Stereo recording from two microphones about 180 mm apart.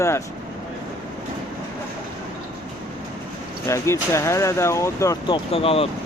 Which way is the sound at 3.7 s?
15° left (ahead or behind).